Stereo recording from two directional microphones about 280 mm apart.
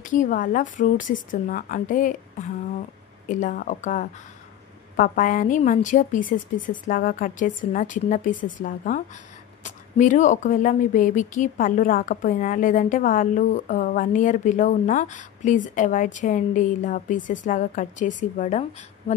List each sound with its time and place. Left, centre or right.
0.0 s speech: left